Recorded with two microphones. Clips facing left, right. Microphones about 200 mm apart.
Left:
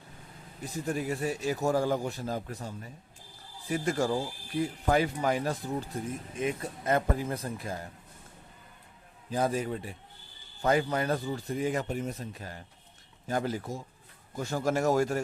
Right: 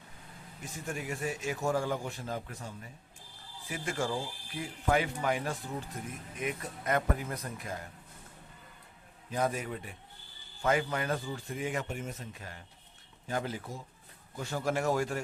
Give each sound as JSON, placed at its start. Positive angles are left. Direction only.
{"t": 0.6, "sound": "a man's voice", "side_deg": 35}
{"t": 9.3, "sound": "a man's voice", "side_deg": 30}